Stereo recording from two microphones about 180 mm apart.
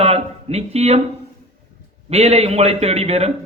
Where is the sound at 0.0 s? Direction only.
35° right (ahead or behind).